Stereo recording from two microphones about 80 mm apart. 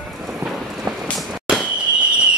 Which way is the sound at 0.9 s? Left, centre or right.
Right.